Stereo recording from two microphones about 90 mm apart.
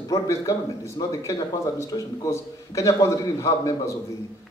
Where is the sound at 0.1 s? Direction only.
35° left (ahead or behind).